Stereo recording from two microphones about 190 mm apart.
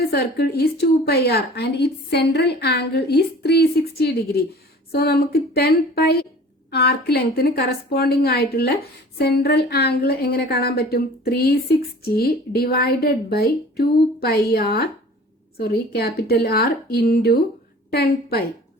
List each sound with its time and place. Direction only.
0.1 s a woman's voice: 55° left (ahead or behind)